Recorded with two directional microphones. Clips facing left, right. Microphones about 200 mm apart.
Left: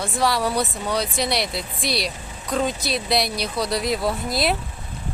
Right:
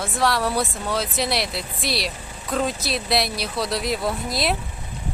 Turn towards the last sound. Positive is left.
turn(degrees=0)  # may be behind; listen again after turning